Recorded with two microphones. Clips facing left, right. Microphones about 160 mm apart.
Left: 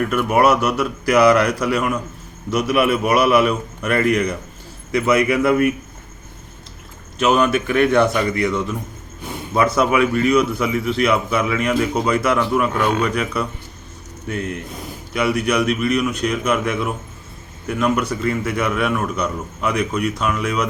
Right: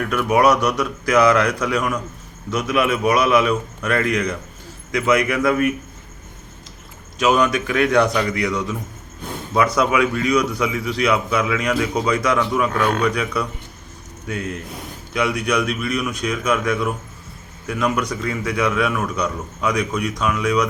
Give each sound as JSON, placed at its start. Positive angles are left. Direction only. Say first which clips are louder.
{"t": 0.0, "sound": "a man's voice", "louder": "left 1 dB", "side_deg": 5}
{"t": 7.3, "sound": "a man's voice", "louder": "left 2 dB", "side_deg": 5}
{"t": 9.2, "sound": "a sound", "louder": "even", "side_deg": 10}
{"t": 9.7, "sound": "a man's voice", "louder": "left 2 dB", "side_deg": 5}
{"t": 15.1, "sound": "a man's voice", "louder": "left 2 dB", "side_deg": 5}